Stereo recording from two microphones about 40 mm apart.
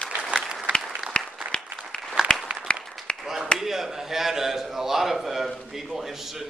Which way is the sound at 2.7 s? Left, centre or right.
Left.